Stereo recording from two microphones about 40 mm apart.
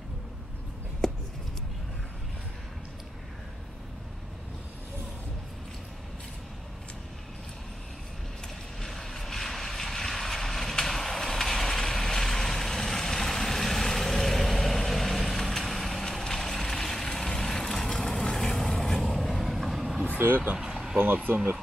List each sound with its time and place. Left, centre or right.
8.8 s vehicle: centre
20.2 s vehicle: right
20.5 s vehicle: centre
21.0 s speech: right